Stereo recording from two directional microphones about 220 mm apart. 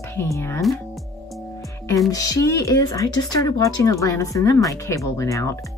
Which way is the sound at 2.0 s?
15° left (ahead or behind).